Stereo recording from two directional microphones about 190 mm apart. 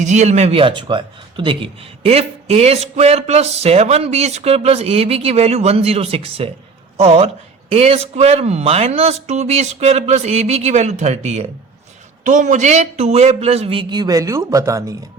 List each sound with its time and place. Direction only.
0.0 s speech: 35° right (ahead or behind); by 14.9 s 15° right (ahead or behind)